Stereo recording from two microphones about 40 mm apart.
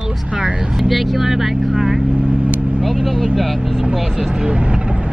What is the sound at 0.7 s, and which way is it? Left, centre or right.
Speech, centre.